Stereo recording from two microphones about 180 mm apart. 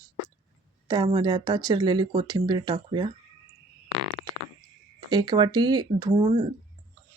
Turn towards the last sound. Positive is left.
turn(degrees=-30)  # may be behind; listen again after turning